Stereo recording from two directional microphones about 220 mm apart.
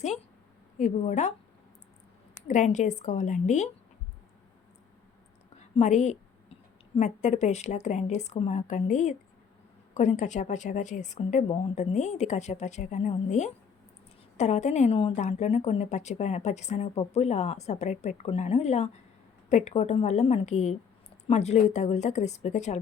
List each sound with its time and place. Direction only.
0.8 s a woman's voice: 35° left (ahead or behind)
2.5 s a woman's voice: 35° left (ahead or behind)
5.5 s a woman's voice: 30° left (ahead or behind)